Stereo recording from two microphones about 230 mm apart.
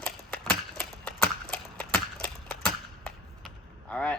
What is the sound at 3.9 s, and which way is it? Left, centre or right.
Speech, centre.